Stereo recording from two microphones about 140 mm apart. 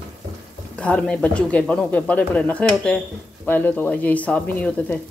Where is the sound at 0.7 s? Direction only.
10° left (ahead or behind).